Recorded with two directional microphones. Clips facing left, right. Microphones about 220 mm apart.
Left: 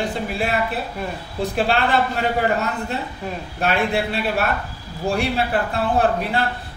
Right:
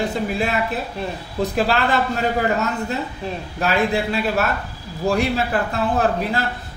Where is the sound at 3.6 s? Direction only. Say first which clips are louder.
Right 1 dB; 40° right (ahead or behind).